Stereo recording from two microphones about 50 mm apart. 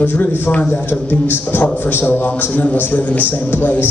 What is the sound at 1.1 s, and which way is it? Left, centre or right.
A man's voice, left.